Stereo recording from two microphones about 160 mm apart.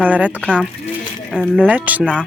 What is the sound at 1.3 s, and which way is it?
Speech, 5° right (ahead or behind).